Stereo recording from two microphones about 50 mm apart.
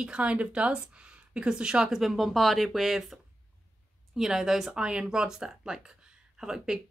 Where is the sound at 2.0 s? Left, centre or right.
Centre.